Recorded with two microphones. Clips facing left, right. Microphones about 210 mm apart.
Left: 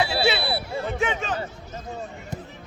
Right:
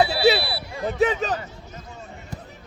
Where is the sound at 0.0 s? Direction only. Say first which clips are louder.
Right 4 dB; 35° right (ahead or behind).